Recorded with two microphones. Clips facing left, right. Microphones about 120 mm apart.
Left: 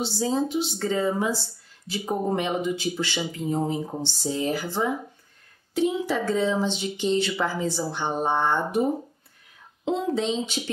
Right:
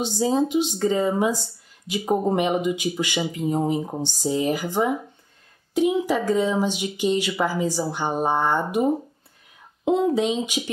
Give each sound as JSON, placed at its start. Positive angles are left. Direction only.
{"t": 0.0, "sound": "a woman's voice", "side_deg": -15}